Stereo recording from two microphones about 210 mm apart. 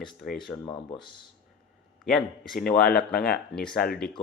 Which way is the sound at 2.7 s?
45° left (ahead or behind).